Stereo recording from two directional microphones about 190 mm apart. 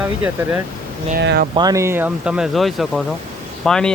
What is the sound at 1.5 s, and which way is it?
Speech, 20° right (ahead or behind).